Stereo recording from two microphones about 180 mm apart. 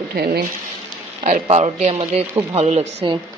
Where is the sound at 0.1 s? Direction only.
60° right (ahead or behind).